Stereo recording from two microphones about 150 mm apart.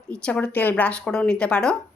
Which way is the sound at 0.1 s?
5° left (ahead or behind).